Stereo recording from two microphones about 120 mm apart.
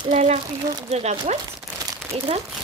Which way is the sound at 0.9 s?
65° right (ahead or behind).